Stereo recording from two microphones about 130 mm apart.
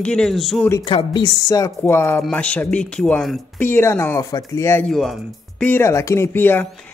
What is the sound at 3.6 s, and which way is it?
Speech, 15° left (ahead or behind).